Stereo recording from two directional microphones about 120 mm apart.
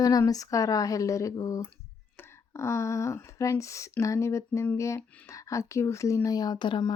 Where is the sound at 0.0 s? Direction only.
30° left (ahead or behind).